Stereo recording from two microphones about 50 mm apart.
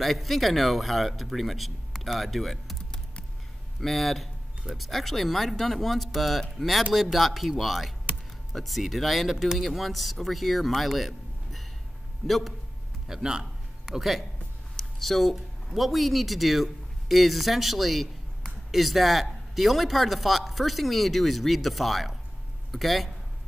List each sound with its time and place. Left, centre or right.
0.0 s speech: centre
13.1 s a man's voice: centre